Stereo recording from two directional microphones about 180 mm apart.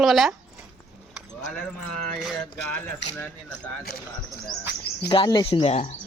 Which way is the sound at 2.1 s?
Centre (ahead or behind).